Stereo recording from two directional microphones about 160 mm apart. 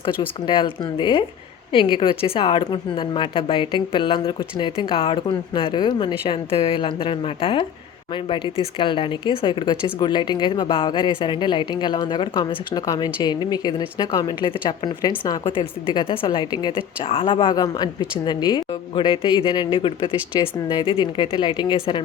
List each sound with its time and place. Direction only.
0.0 s a woman's voice: 30° left (ahead or behind)
8.8 s speech: 30° left (ahead or behind)